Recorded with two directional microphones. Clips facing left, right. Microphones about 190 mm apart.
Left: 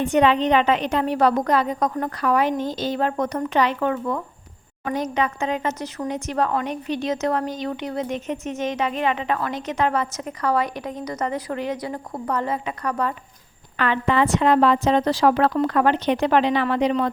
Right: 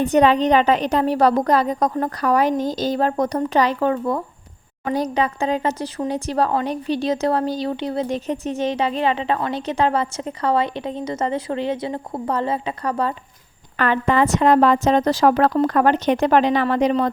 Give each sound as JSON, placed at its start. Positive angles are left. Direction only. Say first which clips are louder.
{"t": 0.0, "sound": "speech", "louder": "right 3 dB", "side_deg": -40}
{"t": 13.7, "sound": "a woman's voice", "louder": "right 2 dB", "side_deg": -45}